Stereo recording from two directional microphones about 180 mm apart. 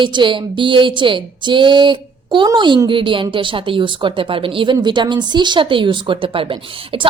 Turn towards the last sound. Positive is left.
turn(degrees=-30)  # may be behind; listen again after turning